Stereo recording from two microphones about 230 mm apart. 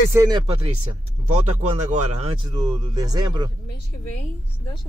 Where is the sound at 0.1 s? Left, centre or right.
Centre.